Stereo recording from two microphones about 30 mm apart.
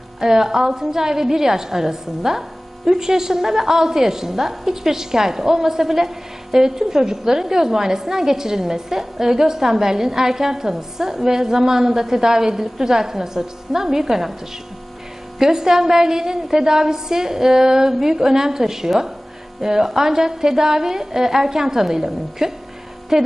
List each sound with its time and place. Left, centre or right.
0.2 s a woman's voice: centre
15.4 s a woman's voice: centre